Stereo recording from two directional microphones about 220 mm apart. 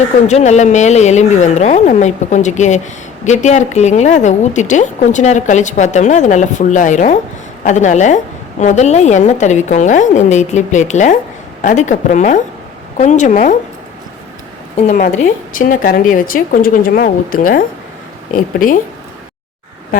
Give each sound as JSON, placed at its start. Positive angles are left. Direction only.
{"t": 0.3, "sound": "a woman's voice", "side_deg": 30}
{"t": 14.8, "sound": "a woman's voice", "side_deg": 35}